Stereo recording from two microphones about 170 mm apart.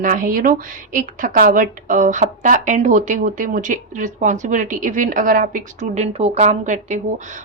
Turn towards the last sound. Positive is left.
turn(degrees=-45)  # may be behind; listen again after turning